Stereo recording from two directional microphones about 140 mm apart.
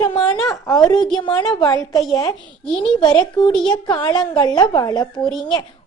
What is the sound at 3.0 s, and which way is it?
Speech, 30° left (ahead or behind).